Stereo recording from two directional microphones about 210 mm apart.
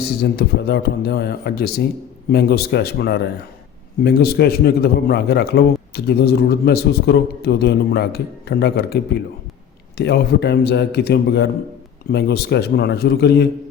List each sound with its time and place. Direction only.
0.0 s a man's voice: 50° left (ahead or behind)
10.0 s a man's voice: 50° left (ahead or behind)